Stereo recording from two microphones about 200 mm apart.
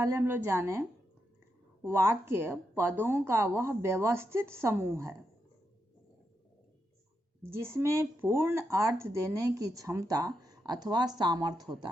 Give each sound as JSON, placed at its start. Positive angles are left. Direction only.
{"t": 0.0, "sound": "speech", "side_deg": -15}
{"t": 7.5, "sound": "speech", "side_deg": -15}